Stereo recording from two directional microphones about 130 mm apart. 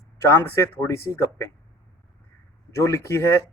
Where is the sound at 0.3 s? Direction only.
20° left (ahead or behind).